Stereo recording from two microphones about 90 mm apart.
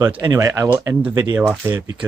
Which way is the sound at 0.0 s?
40° right (ahead or behind).